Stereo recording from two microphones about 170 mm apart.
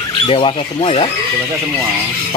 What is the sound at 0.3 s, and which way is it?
Speech, 30° left (ahead or behind).